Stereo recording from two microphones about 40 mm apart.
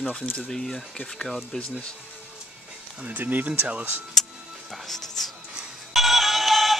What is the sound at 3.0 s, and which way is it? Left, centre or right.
Speech, right.